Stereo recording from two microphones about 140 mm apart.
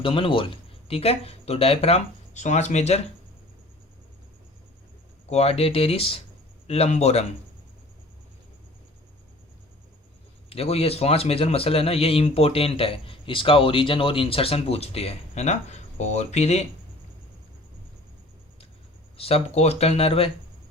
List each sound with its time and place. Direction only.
0.0 s speech: 40° left (ahead or behind)
5.3 s speech: 45° left (ahead or behind)
10.5 s speech: 45° left (ahead or behind)
19.1 s speech: 45° left (ahead or behind)